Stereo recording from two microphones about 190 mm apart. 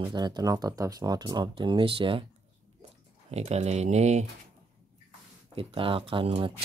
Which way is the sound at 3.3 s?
35° right (ahead or behind).